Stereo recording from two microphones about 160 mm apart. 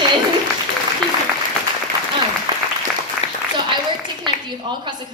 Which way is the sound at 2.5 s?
25° right (ahead or behind).